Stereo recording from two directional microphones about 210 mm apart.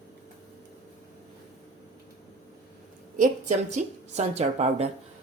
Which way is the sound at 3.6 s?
35° right (ahead or behind).